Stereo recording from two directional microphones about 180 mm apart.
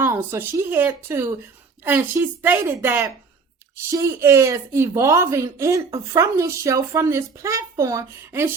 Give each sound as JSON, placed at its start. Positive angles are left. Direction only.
{"t": 0.0, "sound": "a woman's voice", "side_deg": -15}